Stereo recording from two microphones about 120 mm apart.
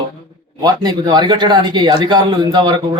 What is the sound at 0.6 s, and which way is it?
A man's voice, 35° right (ahead or behind).